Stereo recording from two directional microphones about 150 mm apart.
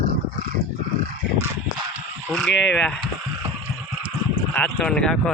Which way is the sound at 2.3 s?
5° left (ahead or behind).